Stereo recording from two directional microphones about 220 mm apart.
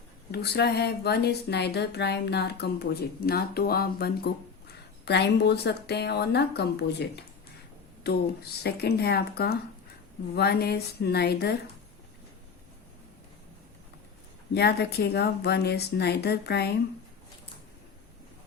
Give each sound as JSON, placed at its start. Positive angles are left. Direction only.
{"t": 0.3, "sound": "speech", "side_deg": 50}
{"t": 14.5, "sound": "speech", "side_deg": 50}